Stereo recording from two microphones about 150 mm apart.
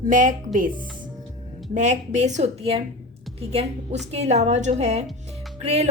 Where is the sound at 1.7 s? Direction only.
50° right (ahead or behind).